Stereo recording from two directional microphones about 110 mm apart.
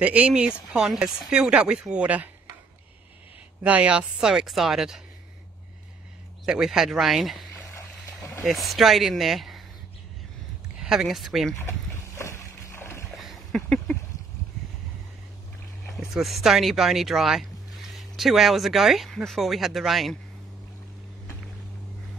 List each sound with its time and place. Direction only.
0.0 s speech: 15° right (ahead or behind)
3.6 s speech: 10° right (ahead or behind)
6.4 s speech: 5° right (ahead or behind)
8.5 s speech: centre (ahead or behind)
10.8 s speech: 5° right (ahead or behind)
12.2 s boat: 25° left (ahead or behind)
13.1 s a sound: centre (ahead or behind)
15.9 s speech: centre (ahead or behind)